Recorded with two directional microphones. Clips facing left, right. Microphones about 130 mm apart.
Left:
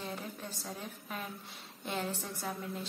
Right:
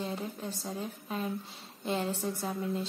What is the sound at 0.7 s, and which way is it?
Speech, 25° right (ahead or behind).